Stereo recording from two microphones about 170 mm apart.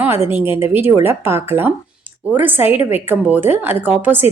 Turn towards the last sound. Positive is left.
turn(degrees=-10)  # may be behind; listen again after turning